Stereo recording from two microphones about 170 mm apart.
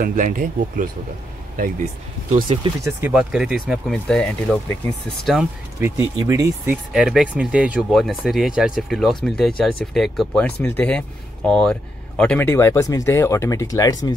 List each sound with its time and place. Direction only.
0.0 s speech: 50° right (ahead or behind)
2.3 s speech: 30° right (ahead or behind)
3.1 s speech: 5° right (ahead or behind)
5.8 s speech: 15° right (ahead or behind)
6.9 s speech: centre (ahead or behind); by 14.1 s 20° left (ahead or behind)